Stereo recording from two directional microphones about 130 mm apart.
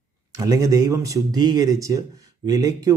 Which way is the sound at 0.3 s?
25° right (ahead or behind).